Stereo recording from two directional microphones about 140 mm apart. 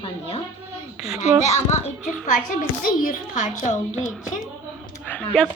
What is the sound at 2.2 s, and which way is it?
A child's voice, 75° left (ahead or behind).